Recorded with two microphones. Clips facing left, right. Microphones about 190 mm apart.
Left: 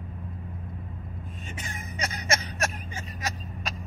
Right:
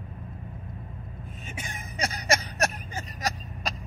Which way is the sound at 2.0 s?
35° right (ahead or behind).